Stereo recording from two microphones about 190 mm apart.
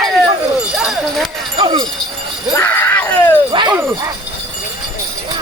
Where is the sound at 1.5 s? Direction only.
25° right (ahead or behind).